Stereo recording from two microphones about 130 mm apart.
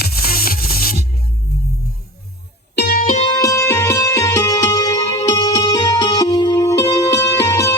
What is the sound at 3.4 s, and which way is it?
Music, 25° left (ahead or behind).